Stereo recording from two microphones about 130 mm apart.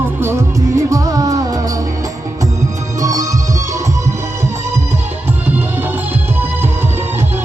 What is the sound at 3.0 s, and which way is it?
Music, 25° right (ahead or behind).